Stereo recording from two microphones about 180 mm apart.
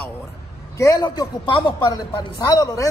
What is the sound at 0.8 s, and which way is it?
Speech, 20° left (ahead or behind).